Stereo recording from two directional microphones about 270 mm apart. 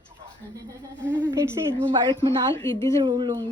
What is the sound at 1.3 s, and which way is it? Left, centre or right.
A woman's voice, centre.